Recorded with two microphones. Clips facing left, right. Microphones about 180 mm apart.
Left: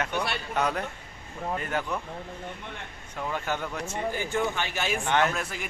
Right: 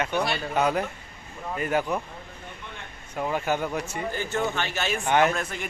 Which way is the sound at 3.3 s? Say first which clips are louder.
Right 5 dB; 10° right (ahead or behind).